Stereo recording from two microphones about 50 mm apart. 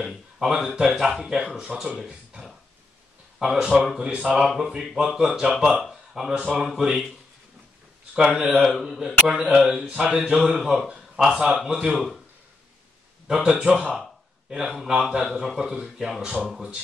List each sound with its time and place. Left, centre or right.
0.0 s speech: centre
3.3 s speech: centre
4.0 s speech: centre
6.3 s speech: right
8.1 s speech: centre
11.9 s speech: centre
13.3 s speech: centre
14.7 s speech: centre